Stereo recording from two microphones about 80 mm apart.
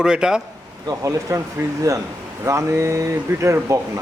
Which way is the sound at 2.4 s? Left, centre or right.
Right.